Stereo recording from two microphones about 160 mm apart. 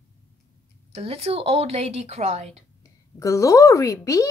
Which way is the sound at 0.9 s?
40° right (ahead or behind).